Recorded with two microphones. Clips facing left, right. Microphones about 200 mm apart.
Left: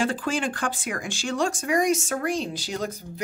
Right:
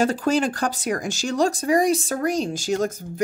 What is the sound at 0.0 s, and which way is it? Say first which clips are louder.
Speech: right 5 dB; 40° right (ahead or behind).